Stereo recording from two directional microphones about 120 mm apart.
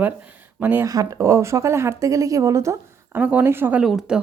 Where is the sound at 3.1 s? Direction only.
15° right (ahead or behind).